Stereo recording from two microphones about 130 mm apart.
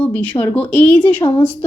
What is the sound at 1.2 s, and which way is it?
Speech, 35° left (ahead or behind).